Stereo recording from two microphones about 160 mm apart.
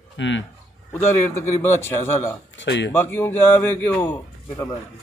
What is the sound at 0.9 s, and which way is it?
Speech, 15° left (ahead or behind).